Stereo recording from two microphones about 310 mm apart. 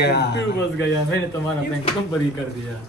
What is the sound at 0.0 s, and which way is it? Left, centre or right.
A man's voice, left.